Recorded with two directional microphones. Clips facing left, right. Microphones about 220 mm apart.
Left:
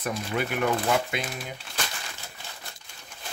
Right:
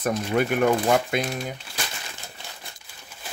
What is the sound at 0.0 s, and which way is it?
Speech, 45° right (ahead or behind).